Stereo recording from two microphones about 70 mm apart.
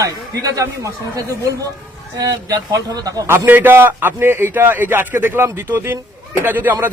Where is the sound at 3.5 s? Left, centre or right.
Right.